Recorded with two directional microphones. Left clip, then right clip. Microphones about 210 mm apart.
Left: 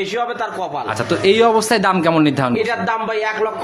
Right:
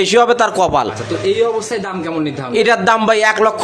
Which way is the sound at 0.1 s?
55° right (ahead or behind).